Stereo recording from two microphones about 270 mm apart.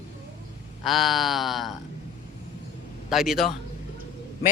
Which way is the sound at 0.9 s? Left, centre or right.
Centre.